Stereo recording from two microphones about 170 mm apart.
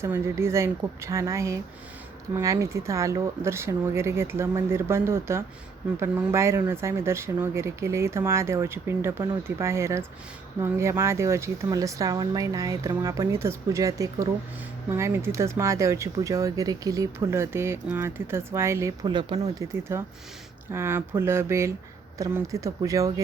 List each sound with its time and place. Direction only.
0.0 s speech: 15° right (ahead or behind)